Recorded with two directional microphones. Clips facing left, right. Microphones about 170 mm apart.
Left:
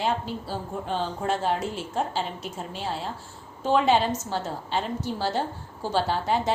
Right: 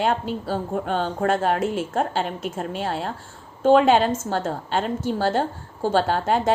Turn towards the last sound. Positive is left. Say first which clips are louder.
# right 4 dB
turn(degrees=-50)  # may be behind; listen again after turning